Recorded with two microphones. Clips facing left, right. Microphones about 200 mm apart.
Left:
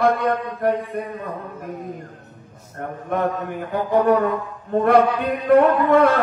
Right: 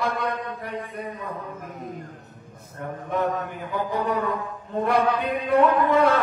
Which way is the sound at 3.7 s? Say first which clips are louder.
Left 9 dB; 55° left (ahead or behind).